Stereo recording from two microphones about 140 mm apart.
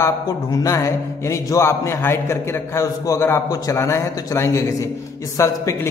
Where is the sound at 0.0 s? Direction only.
25° left (ahead or behind).